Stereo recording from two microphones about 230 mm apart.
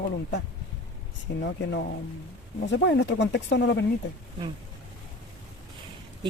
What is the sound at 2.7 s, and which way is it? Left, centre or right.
Speech, left.